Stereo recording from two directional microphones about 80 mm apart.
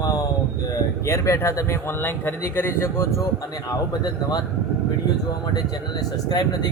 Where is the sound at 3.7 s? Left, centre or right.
Left.